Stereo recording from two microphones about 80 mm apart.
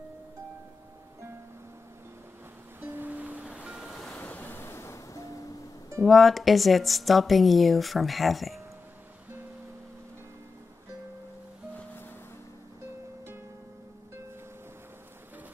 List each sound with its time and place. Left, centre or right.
2.8 s music: right
3.5 s waves: centre
4.2 s waves: left
6.0 s a woman's voice: centre